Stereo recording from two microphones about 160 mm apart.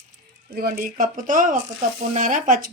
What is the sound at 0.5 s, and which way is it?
Speech, 65° right (ahead or behind).